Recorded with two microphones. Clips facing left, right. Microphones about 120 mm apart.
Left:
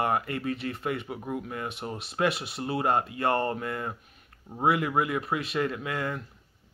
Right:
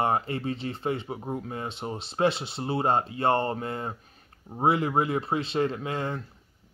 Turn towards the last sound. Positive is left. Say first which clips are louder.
# right 1 dB
turn(degrees=-25)  # may be behind; listen again after turning